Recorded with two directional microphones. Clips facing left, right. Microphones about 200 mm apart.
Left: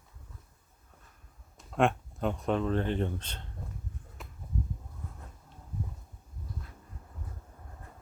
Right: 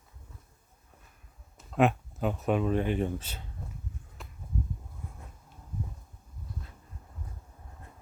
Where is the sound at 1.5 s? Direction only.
5° right (ahead or behind).